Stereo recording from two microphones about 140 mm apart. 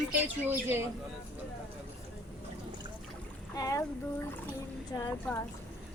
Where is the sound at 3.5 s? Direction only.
25° left (ahead or behind).